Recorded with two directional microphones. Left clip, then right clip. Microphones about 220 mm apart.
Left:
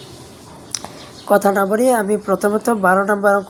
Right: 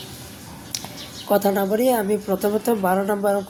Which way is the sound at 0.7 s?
15° left (ahead or behind).